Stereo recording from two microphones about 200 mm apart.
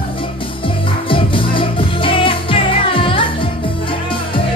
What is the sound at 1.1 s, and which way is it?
Music, 25° left (ahead or behind).